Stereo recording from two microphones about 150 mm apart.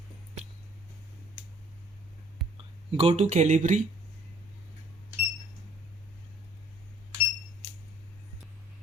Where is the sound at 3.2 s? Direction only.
55° right (ahead or behind).